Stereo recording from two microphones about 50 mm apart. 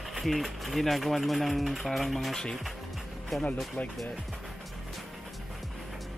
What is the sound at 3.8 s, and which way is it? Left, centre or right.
Speech, left.